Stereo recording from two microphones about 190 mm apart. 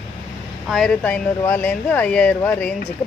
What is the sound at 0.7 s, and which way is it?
Speech, centre (ahead or behind).